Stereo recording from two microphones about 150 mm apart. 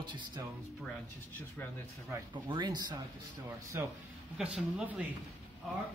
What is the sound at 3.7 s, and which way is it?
Speech, 15° right (ahead or behind).